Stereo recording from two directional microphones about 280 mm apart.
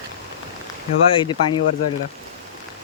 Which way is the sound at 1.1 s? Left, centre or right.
Centre.